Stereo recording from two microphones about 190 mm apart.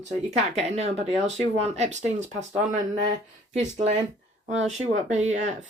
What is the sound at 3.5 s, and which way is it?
Speech, 35° right (ahead or behind).